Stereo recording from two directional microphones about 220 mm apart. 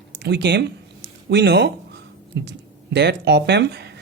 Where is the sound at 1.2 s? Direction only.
50° right (ahead or behind).